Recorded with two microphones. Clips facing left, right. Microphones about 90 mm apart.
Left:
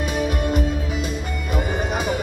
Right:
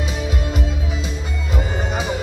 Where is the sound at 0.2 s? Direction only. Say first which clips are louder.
Left 3 dB; 50° left (ahead or behind).